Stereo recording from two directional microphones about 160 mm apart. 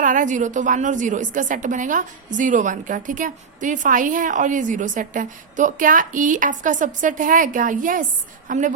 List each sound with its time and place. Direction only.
0.0 s a woman's voice: 55° right (ahead or behind)